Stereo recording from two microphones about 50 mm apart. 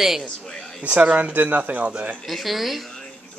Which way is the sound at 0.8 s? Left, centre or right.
Right.